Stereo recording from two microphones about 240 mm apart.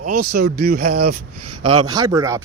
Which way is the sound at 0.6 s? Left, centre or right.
Right.